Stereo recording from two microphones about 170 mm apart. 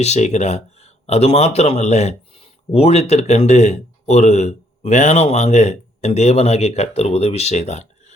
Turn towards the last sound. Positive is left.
turn(degrees=40)  # may be behind; listen again after turning